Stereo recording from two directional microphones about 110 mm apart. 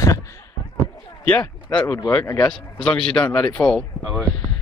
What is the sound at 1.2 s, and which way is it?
A man's voice, 10° left (ahead or behind).